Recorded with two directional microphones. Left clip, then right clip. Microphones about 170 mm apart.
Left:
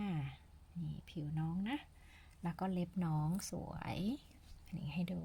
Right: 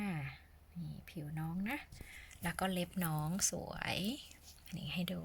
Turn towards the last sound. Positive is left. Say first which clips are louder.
# right 4 dB
turn(degrees=5)  # may be behind; listen again after turning